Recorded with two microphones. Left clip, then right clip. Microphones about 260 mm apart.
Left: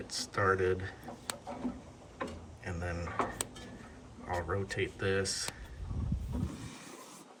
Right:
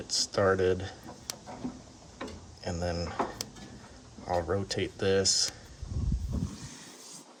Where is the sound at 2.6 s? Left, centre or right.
Centre.